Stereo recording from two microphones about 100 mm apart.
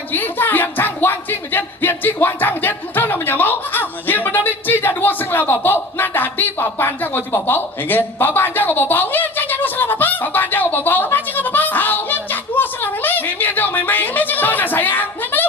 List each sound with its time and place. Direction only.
0.1 s music: 20° left (ahead or behind)